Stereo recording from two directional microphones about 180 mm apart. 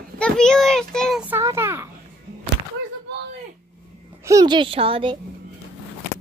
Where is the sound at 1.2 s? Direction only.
15° right (ahead or behind).